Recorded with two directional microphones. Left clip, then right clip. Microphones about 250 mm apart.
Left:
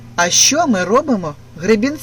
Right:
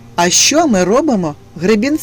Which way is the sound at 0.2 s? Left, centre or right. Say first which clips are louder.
Right 2 dB; right.